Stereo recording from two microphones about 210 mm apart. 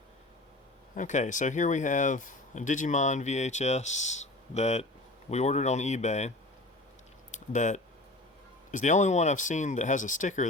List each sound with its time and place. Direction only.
0.9 s speech: 35° left (ahead or behind)
7.3 s a sound: 35° left (ahead or behind)
8.7 s speech: 35° left (ahead or behind)